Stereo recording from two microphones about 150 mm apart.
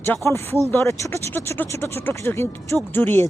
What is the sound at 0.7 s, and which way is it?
Speech, 20° left (ahead or behind).